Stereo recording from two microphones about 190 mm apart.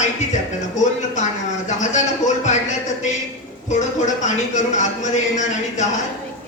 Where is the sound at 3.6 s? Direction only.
40° left (ahead or behind).